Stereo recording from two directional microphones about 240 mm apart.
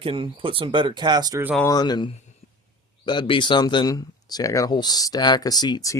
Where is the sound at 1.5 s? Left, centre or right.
Centre.